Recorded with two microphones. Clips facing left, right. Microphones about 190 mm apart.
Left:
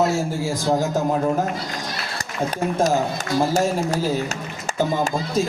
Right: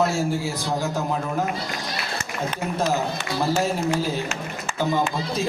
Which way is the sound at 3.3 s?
40° left (ahead or behind).